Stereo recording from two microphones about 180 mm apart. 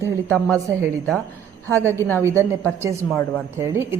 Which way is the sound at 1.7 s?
15° right (ahead or behind).